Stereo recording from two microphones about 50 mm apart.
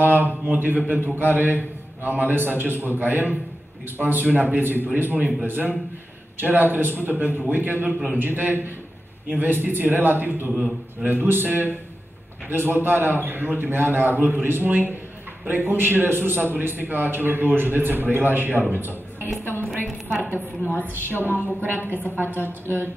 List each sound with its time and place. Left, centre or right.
0.0 s a man's voice: right
18.7 s a sound: right
19.4 s a woman's voice: right